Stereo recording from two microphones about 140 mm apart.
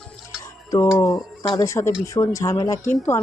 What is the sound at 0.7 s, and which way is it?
A woman's voice, 20° left (ahead or behind).